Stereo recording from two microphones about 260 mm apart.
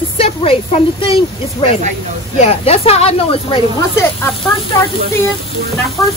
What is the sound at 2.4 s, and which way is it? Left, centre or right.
A woman's voice, left.